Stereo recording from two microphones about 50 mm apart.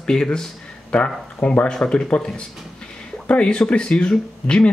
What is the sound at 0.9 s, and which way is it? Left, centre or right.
Speech, left.